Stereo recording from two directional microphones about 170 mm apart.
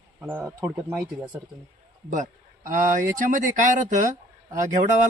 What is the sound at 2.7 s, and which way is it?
Speech, 50° right (ahead or behind).